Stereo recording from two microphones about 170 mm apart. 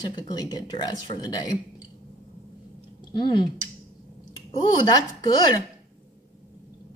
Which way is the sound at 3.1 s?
25° left (ahead or behind).